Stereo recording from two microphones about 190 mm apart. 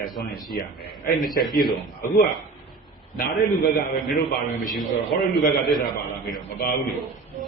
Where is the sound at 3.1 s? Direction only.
55° left (ahead or behind).